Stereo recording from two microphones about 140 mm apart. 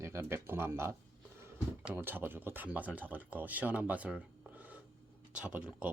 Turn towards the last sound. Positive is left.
turn(degrees=-10)  # may be behind; listen again after turning